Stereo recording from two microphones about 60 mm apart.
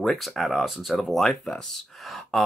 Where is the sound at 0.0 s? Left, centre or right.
Centre.